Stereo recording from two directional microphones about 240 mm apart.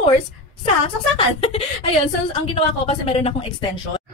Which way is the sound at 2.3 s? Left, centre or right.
Left.